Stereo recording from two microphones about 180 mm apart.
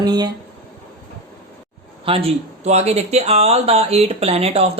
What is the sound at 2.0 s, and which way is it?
Speech, 30° right (ahead or behind).